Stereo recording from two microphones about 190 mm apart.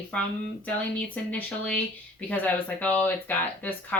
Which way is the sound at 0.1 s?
5° left (ahead or behind).